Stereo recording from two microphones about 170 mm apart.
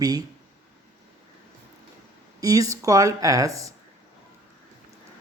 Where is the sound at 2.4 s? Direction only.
20° right (ahead or behind).